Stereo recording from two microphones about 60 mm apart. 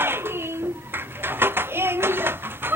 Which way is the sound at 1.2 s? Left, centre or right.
Right.